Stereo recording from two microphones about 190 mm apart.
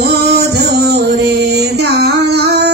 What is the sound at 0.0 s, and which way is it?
Music, 60° right (ahead or behind).